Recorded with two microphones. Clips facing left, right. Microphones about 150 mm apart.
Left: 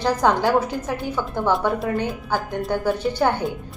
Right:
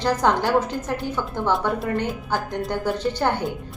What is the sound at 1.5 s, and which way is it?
A woman's voice, centre (ahead or behind).